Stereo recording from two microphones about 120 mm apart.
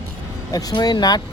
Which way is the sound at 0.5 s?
35° left (ahead or behind).